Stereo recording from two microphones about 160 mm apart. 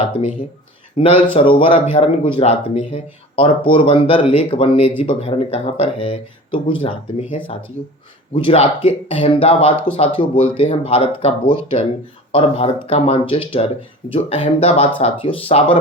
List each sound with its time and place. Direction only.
1.0 s speech: 35° left (ahead or behind)